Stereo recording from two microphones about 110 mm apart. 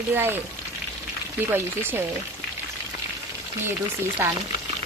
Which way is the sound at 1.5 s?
20° right (ahead or behind).